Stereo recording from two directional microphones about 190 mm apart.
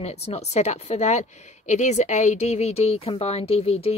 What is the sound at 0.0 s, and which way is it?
A woman's voice, 35° left (ahead or behind).